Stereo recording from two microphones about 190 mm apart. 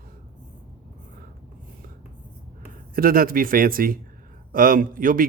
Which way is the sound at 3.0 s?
50° right (ahead or behind).